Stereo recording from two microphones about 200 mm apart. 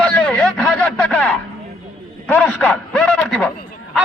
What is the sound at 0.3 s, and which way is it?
Vehicle, 5° left (ahead or behind).